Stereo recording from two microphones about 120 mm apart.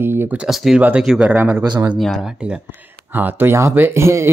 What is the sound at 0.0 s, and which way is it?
Speech, 20° right (ahead or behind).